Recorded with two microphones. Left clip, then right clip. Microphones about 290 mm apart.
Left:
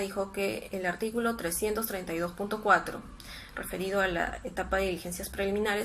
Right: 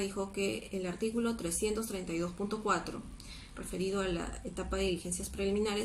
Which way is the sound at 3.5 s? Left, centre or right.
Left.